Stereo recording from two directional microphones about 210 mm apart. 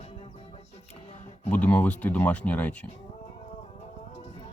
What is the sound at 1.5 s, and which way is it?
Speech, 5° left (ahead or behind).